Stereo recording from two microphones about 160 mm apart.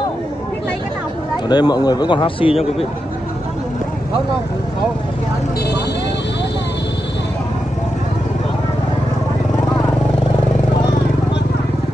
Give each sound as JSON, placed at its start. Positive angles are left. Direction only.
{"t": 1.3, "sound": "speech", "side_deg": 25}